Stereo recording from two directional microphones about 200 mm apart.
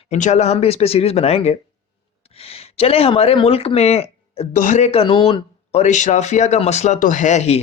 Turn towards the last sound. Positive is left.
turn(degrees=35)  # may be behind; listen again after turning